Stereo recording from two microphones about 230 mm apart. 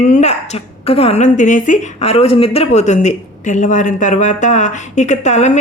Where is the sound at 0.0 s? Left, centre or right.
Left.